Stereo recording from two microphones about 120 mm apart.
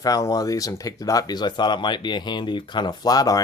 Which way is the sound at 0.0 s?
30° left (ahead or behind).